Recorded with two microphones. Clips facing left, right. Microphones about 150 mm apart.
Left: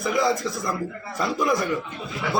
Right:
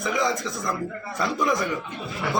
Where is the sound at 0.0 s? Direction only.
5° left (ahead or behind).